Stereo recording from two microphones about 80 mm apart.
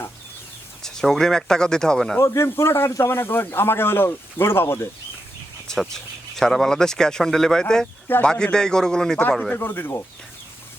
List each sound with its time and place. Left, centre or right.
0.8 s speech: centre
2.1 s a man's voice: left
5.6 s speech: centre
9.6 s speech: left